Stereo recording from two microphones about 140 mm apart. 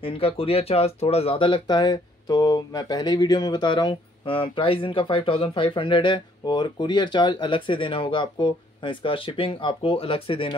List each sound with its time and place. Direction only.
0.0 s speech: 40° left (ahead or behind)